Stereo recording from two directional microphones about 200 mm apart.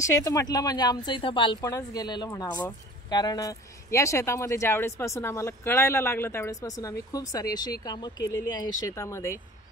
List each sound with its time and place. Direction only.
0.0 s speech: 15° left (ahead or behind)